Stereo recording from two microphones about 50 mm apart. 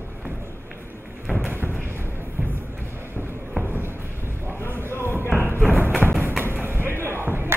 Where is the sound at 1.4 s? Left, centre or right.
Right.